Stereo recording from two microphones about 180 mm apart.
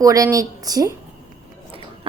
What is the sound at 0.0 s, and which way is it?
Speech, 20° right (ahead or behind).